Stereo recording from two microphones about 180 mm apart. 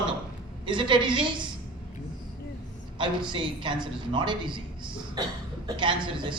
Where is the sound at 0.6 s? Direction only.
25° right (ahead or behind).